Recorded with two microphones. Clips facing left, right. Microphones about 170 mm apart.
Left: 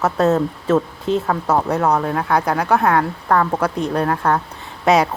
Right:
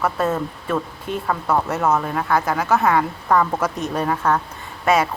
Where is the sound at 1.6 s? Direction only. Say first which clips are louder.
Left 3 dB; centre (ahead or behind).